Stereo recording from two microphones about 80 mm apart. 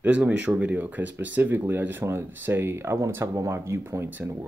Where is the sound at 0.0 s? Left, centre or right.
Centre.